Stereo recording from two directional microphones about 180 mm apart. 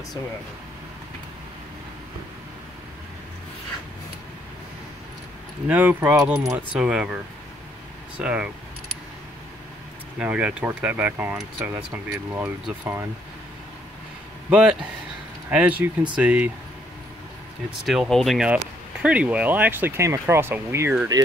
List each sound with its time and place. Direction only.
5.7 s speech: 10° right (ahead or behind)
8.2 s speech: 5° right (ahead or behind)
10.1 s speech: 5° right (ahead or behind)
14.5 s speech: 5° right (ahead or behind)
17.6 s speech: 5° right (ahead or behind); by 21.3 s 20° right (ahead or behind)